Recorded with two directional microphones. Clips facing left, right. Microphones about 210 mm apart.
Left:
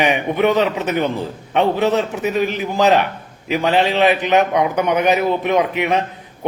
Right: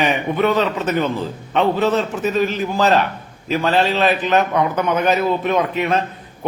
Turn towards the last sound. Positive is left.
turn(degrees=15)  # may be behind; listen again after turning